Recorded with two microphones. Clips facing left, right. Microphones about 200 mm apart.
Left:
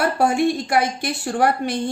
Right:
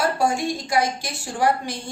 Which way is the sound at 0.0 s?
60° left (ahead or behind).